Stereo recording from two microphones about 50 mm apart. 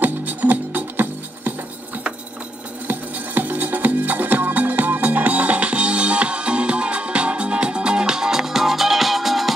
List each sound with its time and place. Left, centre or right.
0.0 s music: right
2.9 s music: right; by 9.5 s centre